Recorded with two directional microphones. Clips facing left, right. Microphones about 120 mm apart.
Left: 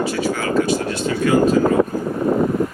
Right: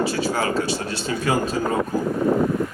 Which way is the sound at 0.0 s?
30° right (ahead or behind).